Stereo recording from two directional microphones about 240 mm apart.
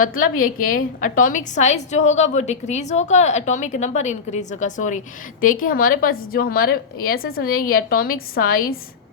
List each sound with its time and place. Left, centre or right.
0.0 s a woman's voice: left